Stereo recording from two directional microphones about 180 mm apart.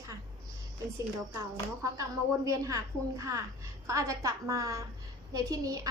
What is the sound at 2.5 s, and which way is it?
A woman's voice, 15° right (ahead or behind).